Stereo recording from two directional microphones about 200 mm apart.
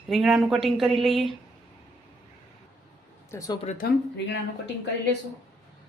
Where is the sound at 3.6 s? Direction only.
50° left (ahead or behind).